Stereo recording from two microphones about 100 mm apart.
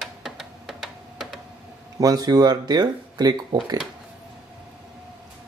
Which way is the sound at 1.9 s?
40° right (ahead or behind).